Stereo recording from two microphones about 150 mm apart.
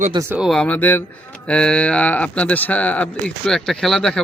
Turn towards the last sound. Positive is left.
turn(degrees=5)  # may be behind; listen again after turning